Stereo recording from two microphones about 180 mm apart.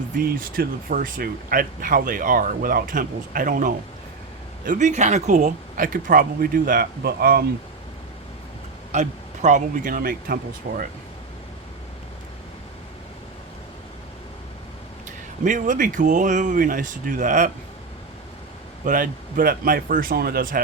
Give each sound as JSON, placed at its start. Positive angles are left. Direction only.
{"t": 0.2, "sound": "speech", "side_deg": -55}
{"t": 8.9, "sound": "speech", "side_deg": -40}
{"t": 15.4, "sound": "speech", "side_deg": -45}
{"t": 18.9, "sound": "speech", "side_deg": -50}